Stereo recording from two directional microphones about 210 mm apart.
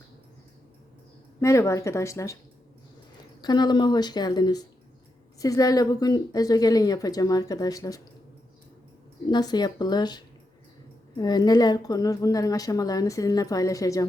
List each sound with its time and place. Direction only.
1.4 s a woman's voice: 15° left (ahead or behind)
3.4 s a woman's voice: 20° left (ahead or behind)
9.2 s a woman's voice: 20° left (ahead or behind)